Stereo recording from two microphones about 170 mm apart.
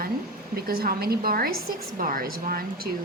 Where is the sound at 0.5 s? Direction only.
60° right (ahead or behind).